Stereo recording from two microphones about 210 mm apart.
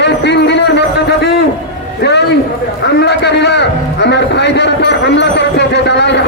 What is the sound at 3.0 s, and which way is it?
A man's voice, 55° left (ahead or behind).